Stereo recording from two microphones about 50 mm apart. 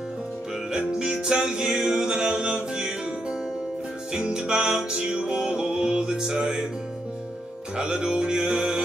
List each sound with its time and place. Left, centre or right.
0.7 s music: centre
7.7 s music: centre